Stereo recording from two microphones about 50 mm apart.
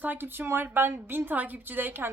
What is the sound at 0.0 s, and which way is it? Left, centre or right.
A woman's voice, right.